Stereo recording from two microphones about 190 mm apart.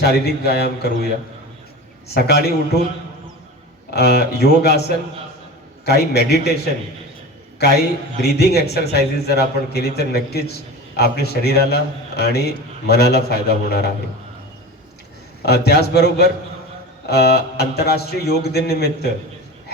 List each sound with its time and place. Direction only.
0.0 s a man's voice: 55° left (ahead or behind)
2.1 s a man's voice: 55° left (ahead or behind)
3.9 s a man's voice: 55° left (ahead or behind)
7.6 s a man's voice: 60° left (ahead or behind)
15.4 s a man's voice: 60° left (ahead or behind)